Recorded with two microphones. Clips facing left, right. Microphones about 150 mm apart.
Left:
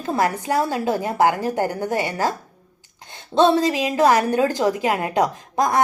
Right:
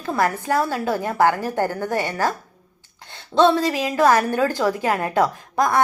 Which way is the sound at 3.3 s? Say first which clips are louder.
Even; 20° left (ahead or behind).